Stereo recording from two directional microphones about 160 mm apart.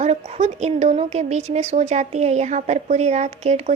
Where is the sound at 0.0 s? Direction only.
45° right (ahead or behind).